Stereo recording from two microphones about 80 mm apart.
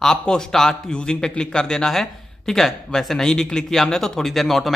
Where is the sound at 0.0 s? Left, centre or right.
Centre.